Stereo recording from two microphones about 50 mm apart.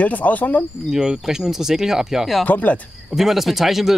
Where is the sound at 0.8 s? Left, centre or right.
Centre.